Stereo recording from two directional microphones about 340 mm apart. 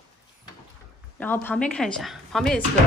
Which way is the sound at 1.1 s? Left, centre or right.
Centre.